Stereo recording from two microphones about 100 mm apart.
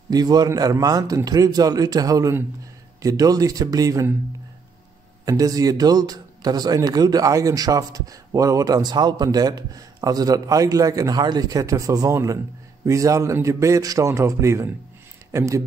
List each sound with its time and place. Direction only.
0.1 s a man's voice: 40° right (ahead or behind)
5.2 s a man's voice: 40° right (ahead or behind)